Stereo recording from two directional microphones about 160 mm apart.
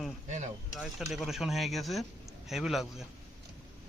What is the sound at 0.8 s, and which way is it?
A man's voice, centre (ahead or behind).